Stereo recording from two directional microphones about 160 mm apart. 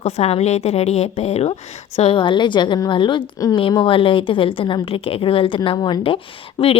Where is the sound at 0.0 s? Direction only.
40° left (ahead or behind).